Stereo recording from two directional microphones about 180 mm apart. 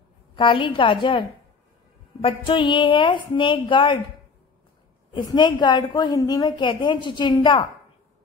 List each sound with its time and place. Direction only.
0.4 s a woman's voice: 30° left (ahead or behind)
2.2 s a woman's voice: 30° left (ahead or behind)
5.1 s a woman's voice: 25° left (ahead or behind)